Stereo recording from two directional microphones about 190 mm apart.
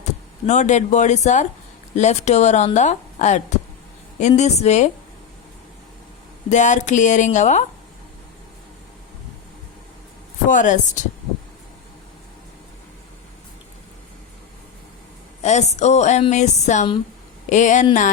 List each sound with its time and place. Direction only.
0.0 s a woman's voice: 40° left (ahead or behind)
6.5 s a woman's voice: 40° left (ahead or behind)
10.5 s a woman's voice: 40° left (ahead or behind)
15.4 s a woman's voice: 35° left (ahead or behind)